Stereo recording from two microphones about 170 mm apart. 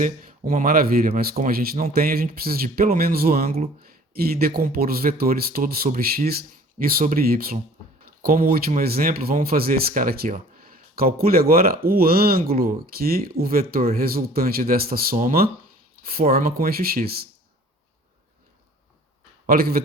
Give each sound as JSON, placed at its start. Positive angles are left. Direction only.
{"t": 0.0, "sound": "speech", "side_deg": -50}
{"t": 19.5, "sound": "speech", "side_deg": -60}